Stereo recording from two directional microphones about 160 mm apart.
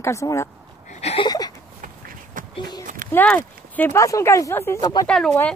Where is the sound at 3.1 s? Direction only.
10° left (ahead or behind).